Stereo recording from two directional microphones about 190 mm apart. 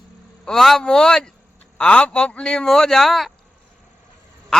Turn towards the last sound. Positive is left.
turn(degrees=5)  # may be behind; listen again after turning